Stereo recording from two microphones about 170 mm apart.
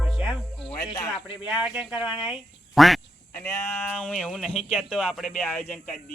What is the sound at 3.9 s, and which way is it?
Speech, 5° left (ahead or behind).